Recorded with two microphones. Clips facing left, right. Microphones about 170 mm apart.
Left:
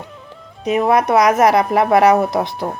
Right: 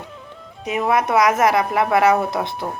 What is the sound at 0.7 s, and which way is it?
Speech, 25° left (ahead or behind).